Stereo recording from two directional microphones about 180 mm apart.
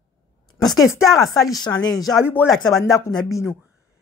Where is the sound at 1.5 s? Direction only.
25° left (ahead or behind).